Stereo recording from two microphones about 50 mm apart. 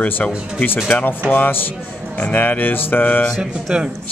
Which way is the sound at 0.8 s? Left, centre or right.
Left.